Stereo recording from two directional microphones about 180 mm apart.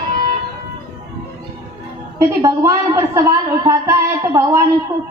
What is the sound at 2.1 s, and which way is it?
A woman's voice, 20° right (ahead or behind).